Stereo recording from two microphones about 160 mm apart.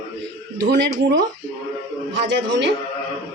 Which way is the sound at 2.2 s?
90° right.